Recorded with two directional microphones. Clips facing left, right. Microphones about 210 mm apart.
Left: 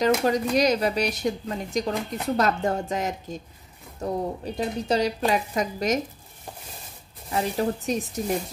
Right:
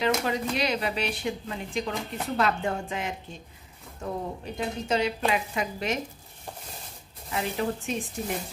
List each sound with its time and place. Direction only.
0.0 s speech: 40° left (ahead or behind)
7.2 s speech: 40° left (ahead or behind)